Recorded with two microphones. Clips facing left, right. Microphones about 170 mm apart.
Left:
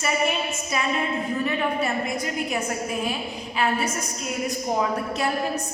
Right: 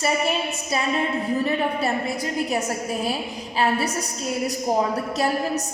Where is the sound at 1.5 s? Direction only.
35° right (ahead or behind).